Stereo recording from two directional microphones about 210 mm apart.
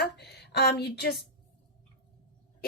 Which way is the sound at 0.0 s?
50° left (ahead or behind).